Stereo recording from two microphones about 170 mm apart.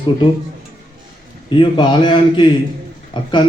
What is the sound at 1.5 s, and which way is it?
A man's voice, 30° left (ahead or behind).